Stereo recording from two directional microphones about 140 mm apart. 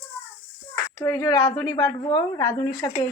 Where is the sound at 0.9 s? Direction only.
20° left (ahead or behind).